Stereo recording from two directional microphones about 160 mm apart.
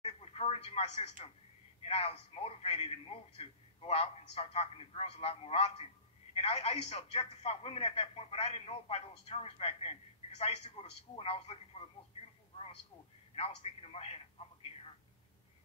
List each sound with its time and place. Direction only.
0.0 s telephone: 40° left (ahead or behind)
1.9 s speech: 40° left (ahead or behind)
13.9 s speech: 40° left (ahead or behind)